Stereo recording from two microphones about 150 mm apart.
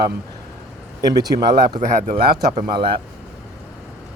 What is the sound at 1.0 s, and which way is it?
Speech, 25° right (ahead or behind).